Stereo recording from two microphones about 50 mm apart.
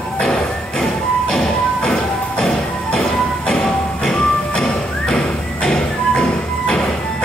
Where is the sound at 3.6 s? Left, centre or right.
Centre.